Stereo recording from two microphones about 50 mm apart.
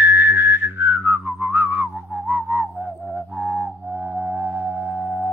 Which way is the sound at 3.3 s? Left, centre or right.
Right.